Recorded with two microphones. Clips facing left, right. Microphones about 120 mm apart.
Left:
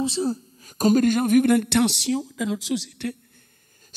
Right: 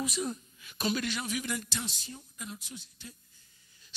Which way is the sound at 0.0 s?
30° left (ahead or behind).